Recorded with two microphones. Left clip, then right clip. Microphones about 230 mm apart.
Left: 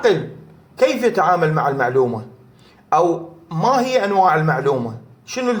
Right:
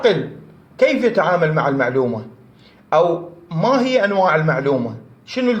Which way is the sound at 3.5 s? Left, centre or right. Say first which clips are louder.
Even; left.